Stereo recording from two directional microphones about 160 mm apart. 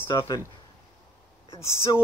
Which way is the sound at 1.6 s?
15° left (ahead or behind).